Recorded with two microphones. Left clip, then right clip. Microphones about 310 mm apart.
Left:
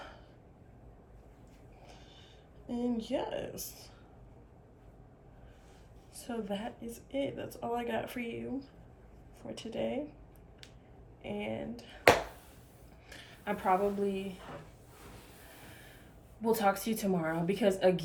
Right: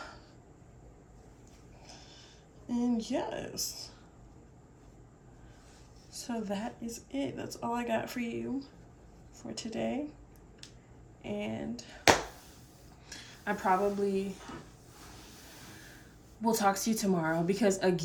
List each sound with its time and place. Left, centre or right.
2.6 s speech: centre
6.1 s speech: centre
11.2 s speech: centre
13.1 s a woman's voice: centre
16.4 s speech: centre